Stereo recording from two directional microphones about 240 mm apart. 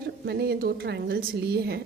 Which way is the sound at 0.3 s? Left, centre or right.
Right.